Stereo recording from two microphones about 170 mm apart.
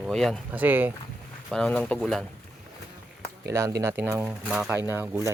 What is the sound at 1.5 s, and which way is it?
Speech, 5° left (ahead or behind).